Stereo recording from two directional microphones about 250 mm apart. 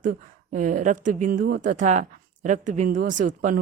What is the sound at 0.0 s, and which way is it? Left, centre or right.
A woman's voice, right.